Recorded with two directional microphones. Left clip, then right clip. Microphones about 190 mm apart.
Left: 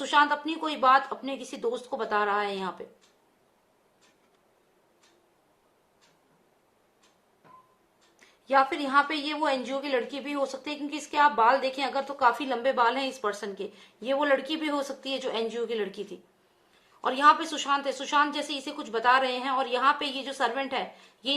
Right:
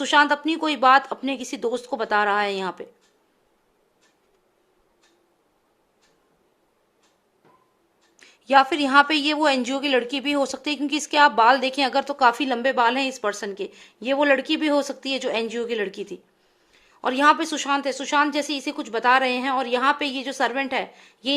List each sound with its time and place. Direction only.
0.0 s a woman's voice: 45° right (ahead or behind)
8.4 s a woman's voice: 50° right (ahead or behind)